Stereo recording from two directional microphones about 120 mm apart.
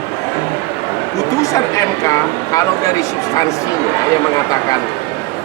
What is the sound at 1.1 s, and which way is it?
Speech, 25° left (ahead or behind).